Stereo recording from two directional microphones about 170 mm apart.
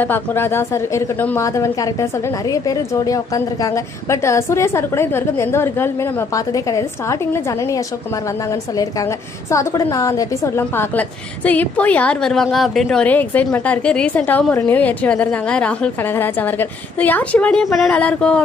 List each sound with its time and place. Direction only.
0.0 s a woman's voice: 10° left (ahead or behind)
9.5 s a woman's voice: 15° left (ahead or behind)